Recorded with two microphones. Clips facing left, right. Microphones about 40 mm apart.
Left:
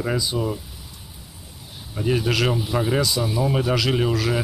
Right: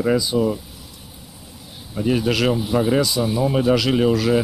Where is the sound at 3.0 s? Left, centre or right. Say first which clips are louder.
Right 3 dB; right.